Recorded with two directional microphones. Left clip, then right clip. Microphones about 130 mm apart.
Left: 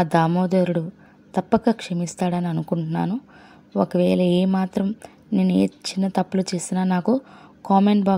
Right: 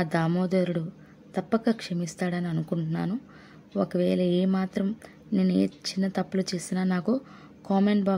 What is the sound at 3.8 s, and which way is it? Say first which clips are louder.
Speech: left 6 dB; 30° left (ahead or behind).